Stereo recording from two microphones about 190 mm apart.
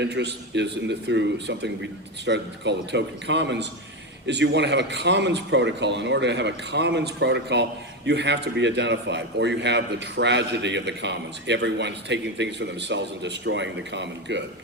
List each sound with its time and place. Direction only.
0.0 s a man's voice: 65° right (ahead or behind)